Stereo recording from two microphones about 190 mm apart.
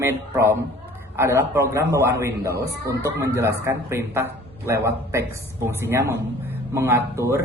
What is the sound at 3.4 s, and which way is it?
Speech, 15° right (ahead or behind).